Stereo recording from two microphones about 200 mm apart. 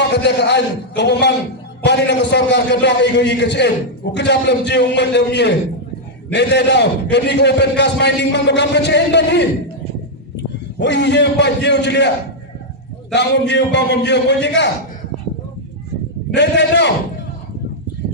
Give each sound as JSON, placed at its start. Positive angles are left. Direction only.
{"t": 0.1, "sound": "a man's voice", "side_deg": 55}
{"t": 10.8, "sound": "a man's voice", "side_deg": 60}
{"t": 13.5, "sound": "a man's voice", "side_deg": 60}
{"t": 16.3, "sound": "a man's voice", "side_deg": 60}